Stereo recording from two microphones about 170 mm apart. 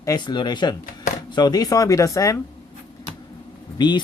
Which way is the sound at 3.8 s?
25° left (ahead or behind).